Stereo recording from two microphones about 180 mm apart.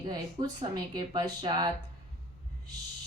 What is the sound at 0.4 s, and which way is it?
A woman's voice, 25° right (ahead or behind).